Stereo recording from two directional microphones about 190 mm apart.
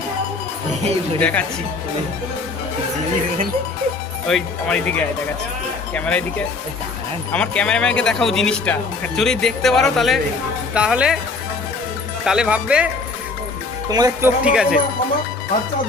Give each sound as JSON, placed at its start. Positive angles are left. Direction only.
{"t": 1.2, "sound": "speech", "side_deg": 5}
{"t": 4.3, "sound": "speech", "side_deg": 5}
{"t": 12.2, "sound": "speech", "side_deg": -5}
{"t": 13.9, "sound": "speech", "side_deg": -20}
{"t": 14.4, "sound": "speech", "side_deg": -5}